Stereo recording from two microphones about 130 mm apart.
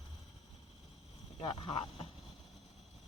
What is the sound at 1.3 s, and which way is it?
Speech, 35° left (ahead or behind).